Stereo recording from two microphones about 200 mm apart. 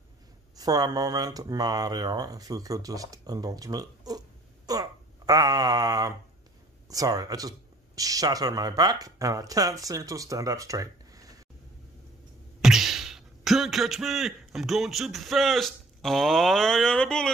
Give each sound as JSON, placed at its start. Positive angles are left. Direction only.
{"t": 0.6, "sound": "speech", "side_deg": -20}
{"t": 12.6, "sound": "speech", "side_deg": 0}